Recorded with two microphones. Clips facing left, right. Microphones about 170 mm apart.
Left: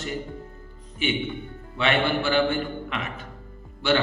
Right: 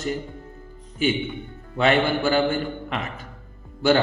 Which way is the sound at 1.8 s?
40° right (ahead or behind).